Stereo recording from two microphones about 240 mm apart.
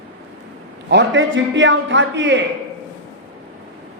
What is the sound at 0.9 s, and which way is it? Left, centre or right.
A woman's voice, right.